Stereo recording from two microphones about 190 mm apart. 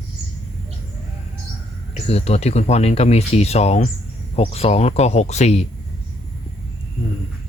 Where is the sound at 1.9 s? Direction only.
35° left (ahead or behind).